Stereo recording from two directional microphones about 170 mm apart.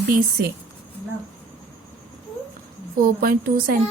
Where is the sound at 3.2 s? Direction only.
60° right (ahead or behind).